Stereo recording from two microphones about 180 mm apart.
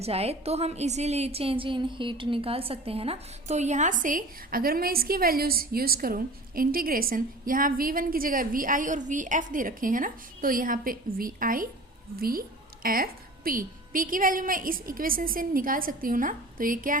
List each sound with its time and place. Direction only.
0.0 s a woman's voice: 35° right (ahead or behind); by 17.0 s 50° right (ahead or behind)